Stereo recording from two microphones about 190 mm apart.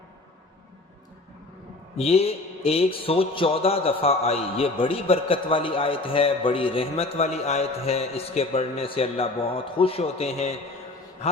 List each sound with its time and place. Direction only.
2.0 s mantra: 30° left (ahead or behind)